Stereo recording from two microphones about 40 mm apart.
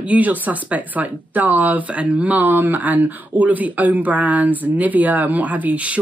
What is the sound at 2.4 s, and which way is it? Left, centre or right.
Speech, right.